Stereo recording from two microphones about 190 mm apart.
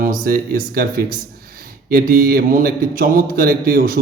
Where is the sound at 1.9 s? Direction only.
50° right (ahead or behind).